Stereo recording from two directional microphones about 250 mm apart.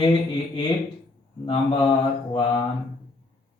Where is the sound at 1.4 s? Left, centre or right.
Centre.